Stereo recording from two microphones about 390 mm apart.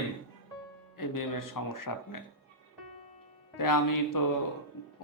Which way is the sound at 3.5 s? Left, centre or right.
Left.